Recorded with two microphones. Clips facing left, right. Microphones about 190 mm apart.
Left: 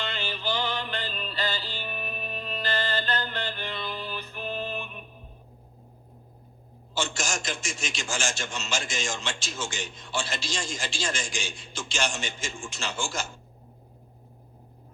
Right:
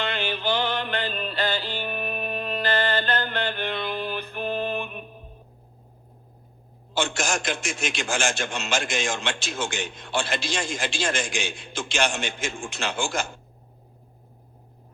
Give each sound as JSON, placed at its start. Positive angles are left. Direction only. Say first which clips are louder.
{"t": 0.0, "sound": "music", "louder": "right 5 dB", "side_deg": -55}
{"t": 6.9, "sound": "a man's voice", "louder": "right 5 dB", "side_deg": -55}